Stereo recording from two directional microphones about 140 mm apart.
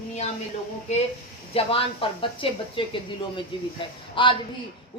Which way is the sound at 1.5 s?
40° left (ahead or behind).